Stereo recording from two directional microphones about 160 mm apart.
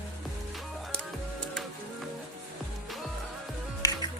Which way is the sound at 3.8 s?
25° left (ahead or behind).